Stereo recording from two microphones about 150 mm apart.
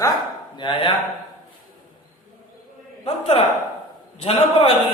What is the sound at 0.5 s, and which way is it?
Speech, 30° left (ahead or behind).